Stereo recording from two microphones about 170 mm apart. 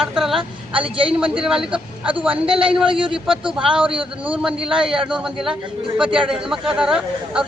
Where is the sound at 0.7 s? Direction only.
30° right (ahead or behind).